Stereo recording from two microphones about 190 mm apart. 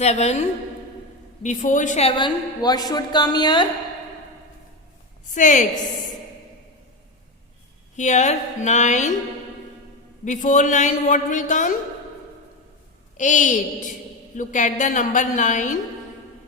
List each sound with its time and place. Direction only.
0.0 s a woman's voice: 35° left (ahead or behind)
5.3 s a woman's voice: 40° left (ahead or behind)
7.9 s a woman's voice: 40° left (ahead or behind)
10.2 s a woman's voice: 40° left (ahead or behind)
13.1 s a woman's voice: 40° left (ahead or behind)